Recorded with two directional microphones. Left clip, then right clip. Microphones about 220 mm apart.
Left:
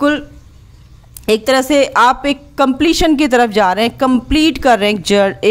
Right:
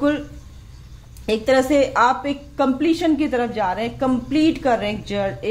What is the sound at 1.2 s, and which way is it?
A woman's voice, 40° left (ahead or behind).